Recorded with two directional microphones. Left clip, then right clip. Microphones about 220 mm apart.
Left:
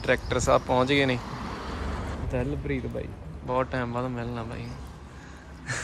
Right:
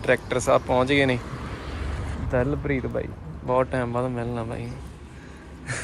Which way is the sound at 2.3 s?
Centre (ahead or behind).